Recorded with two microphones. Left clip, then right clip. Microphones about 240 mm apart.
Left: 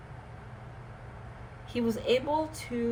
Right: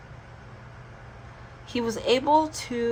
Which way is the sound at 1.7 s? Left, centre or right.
Right.